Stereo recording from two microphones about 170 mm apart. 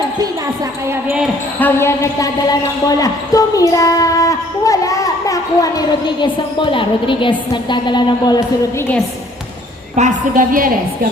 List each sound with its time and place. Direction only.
0.9 s speech: 15° right (ahead or behind)
1.5 s speech: 15° left (ahead or behind)
9.9 s a woman's voice: 50° right (ahead or behind)